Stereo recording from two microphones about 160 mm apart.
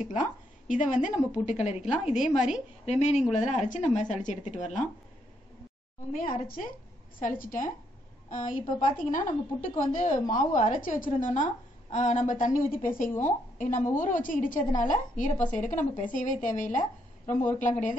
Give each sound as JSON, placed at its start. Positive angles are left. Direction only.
{"t": 0.0, "sound": "a woman's voice", "side_deg": 50}
{"t": 6.4, "sound": "a woman's voice", "side_deg": 60}
{"t": 8.5, "sound": "a woman's voice", "side_deg": 35}
{"t": 9.1, "sound": "a woman's voice", "side_deg": 55}